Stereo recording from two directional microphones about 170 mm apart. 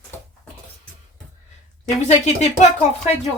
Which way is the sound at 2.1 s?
40° left (ahead or behind).